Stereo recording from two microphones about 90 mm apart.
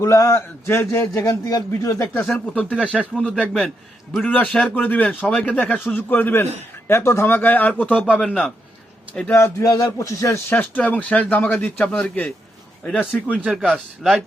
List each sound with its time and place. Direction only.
0.0 s a man's voice: 35° left (ahead or behind)
2.1 s a man's voice: 20° left (ahead or behind)
9.3 s a man's voice: 25° left (ahead or behind)
9.6 s a man's voice: 40° left (ahead or behind)
10.5 s speech: 20° left (ahead or behind)
13.4 s a man's voice: 10° right (ahead or behind)